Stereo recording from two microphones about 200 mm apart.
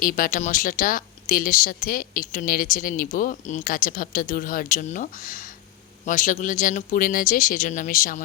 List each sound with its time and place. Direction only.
0.0 s speech: 45° left (ahead or behind)